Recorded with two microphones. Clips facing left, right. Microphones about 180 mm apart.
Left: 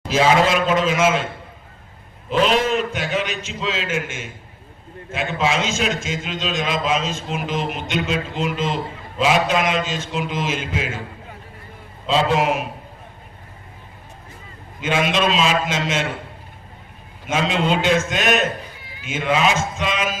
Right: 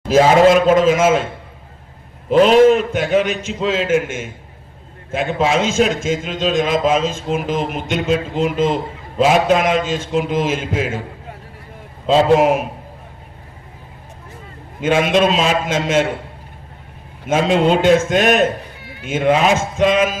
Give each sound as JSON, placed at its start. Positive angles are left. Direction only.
{"t": 0.1, "sound": "a man's voice", "side_deg": -45}
{"t": 2.3, "sound": "a man's voice", "side_deg": -50}
{"t": 12.0, "sound": "a man's voice", "side_deg": -50}
{"t": 14.8, "sound": "a man's voice", "side_deg": -50}
{"t": 17.2, "sound": "a man's voice", "side_deg": -50}